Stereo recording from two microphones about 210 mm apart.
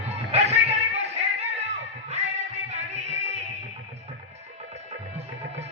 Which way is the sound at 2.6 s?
35° right (ahead or behind).